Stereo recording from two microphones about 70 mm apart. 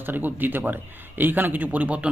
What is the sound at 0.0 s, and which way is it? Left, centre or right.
Speech, right.